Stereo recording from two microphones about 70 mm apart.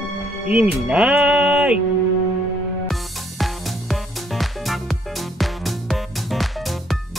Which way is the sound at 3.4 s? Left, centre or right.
Centre.